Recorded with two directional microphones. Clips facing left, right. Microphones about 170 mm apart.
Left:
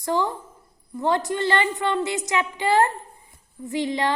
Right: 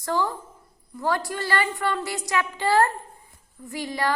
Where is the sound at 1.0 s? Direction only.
20° left (ahead or behind).